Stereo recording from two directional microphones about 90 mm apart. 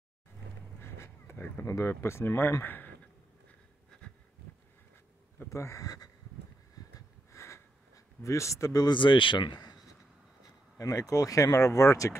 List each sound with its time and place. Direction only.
0.7 s speech: 30° left (ahead or behind)
5.5 s speech: 35° left (ahead or behind)
6.8 s snort: 40° left (ahead or behind)
7.2 s a sound: 30° left (ahead or behind)
8.8 s speech: 65° left (ahead or behind)
10.8 s speech: 40° left (ahead or behind)